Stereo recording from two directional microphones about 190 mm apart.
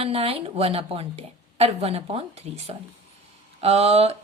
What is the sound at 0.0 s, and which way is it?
A woman's voice, 30° right (ahead or behind).